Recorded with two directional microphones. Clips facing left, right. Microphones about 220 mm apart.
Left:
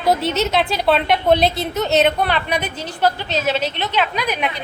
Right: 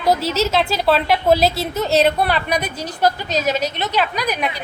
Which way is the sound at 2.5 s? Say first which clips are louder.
Right 1 dB; 40° right (ahead or behind).